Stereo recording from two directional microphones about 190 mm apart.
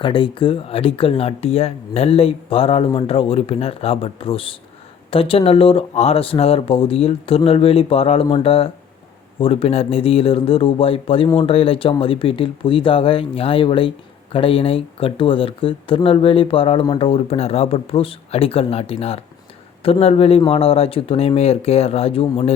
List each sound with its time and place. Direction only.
0.0 s speech: 25° left (ahead or behind)